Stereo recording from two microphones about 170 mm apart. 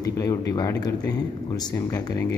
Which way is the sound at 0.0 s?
20° left (ahead or behind).